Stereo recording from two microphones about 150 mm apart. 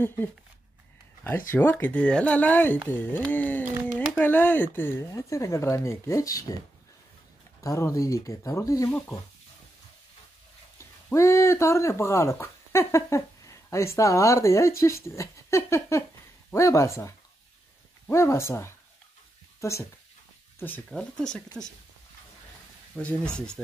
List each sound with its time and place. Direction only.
0.0 s speech: 15° left (ahead or behind)
1.5 s speech: 15° left (ahead or behind)
7.6 s speech: 20° left (ahead or behind)
10.8 s speech: 20° left (ahead or behind)
22.9 s speech: 5° left (ahead or behind)